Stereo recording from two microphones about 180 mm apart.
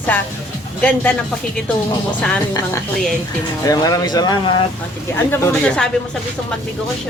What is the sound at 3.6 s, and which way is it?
Speech, 20° left (ahead or behind).